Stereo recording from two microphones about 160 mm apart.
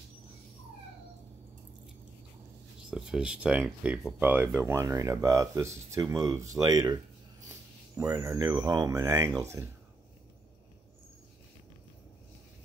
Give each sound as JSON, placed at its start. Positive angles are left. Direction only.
{"t": 2.9, "sound": "speech", "side_deg": -5}